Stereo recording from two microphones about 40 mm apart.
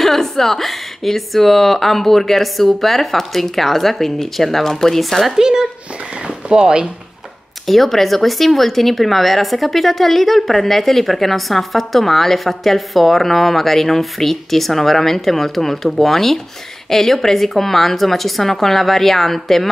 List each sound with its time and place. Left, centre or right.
0.0 s speech: centre
5.2 s speech: centre
7.6 s speech: centre